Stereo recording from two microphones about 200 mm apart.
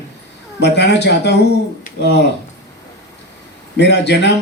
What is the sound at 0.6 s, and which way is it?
Speech, 60° left (ahead or behind).